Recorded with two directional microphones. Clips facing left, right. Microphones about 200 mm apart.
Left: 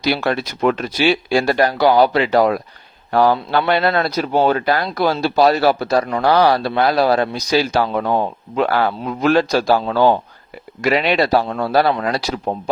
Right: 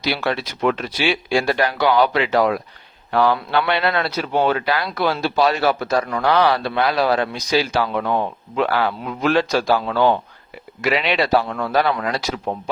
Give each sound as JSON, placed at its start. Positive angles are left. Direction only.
{"t": 0.0, "sound": "a man's voice", "side_deg": 45}